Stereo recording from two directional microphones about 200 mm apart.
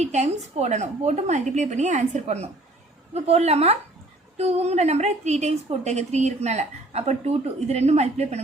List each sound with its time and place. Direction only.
0.0 s a woman's voice: 35° right (ahead or behind)